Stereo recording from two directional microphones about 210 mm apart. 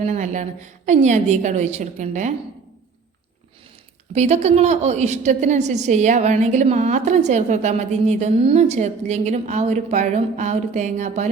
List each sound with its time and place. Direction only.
0.0 s a woman's voice: 35° right (ahead or behind)
4.1 s a woman's voice: 30° right (ahead or behind)